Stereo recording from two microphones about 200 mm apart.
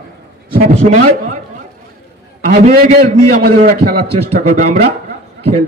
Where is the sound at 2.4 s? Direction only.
35° right (ahead or behind).